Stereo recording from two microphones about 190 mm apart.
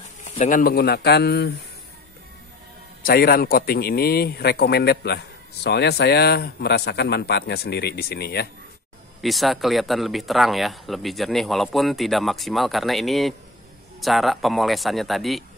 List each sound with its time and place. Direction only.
0.2 s a man's voice: 40° left (ahead or behind); by 1.5 s 60° left (ahead or behind)
3.0 s a man's voice: 50° left (ahead or behind)
9.2 s a man's voice: centre (ahead or behind)